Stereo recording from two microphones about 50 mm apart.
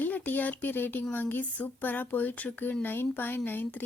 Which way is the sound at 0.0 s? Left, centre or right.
Left.